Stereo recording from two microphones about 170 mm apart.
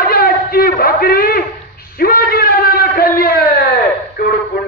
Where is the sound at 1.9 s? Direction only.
60° left (ahead or behind).